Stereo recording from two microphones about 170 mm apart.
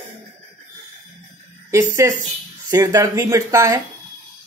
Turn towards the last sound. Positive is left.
turn(degrees=-20)  # may be behind; listen again after turning